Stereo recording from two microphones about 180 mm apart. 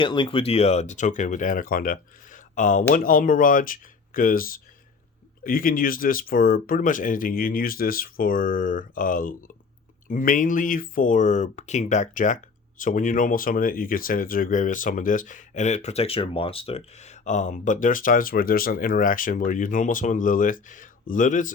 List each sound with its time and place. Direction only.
0.0 s speech: 25° left (ahead or behind); by 21.5 s 45° left (ahead or behind)